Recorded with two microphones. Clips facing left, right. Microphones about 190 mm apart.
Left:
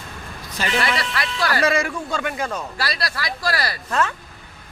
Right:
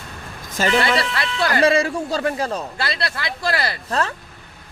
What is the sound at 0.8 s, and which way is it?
Speech, 25° right (ahead or behind).